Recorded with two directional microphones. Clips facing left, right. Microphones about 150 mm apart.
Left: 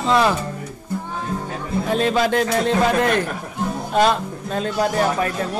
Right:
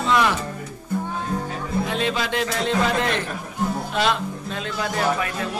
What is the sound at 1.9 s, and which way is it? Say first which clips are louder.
A man's voice: left 10 dB; 45° left (ahead or behind).